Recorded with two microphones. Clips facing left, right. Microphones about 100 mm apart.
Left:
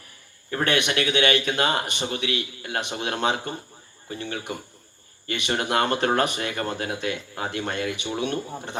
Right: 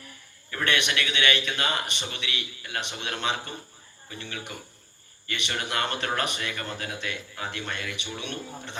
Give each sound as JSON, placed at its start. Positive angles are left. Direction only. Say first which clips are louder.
{"t": 0.5, "sound": "speech", "louder": "left 4 dB", "side_deg": 35}